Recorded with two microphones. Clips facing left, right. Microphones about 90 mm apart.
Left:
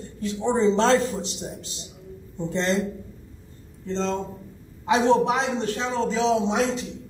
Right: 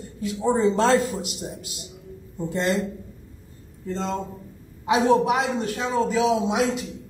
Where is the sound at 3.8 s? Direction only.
10° right (ahead or behind).